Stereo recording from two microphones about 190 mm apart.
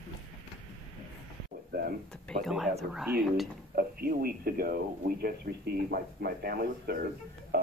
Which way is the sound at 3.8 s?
50° right (ahead or behind).